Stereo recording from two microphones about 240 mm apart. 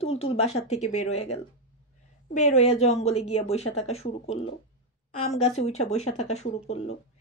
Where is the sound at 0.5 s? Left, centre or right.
Left.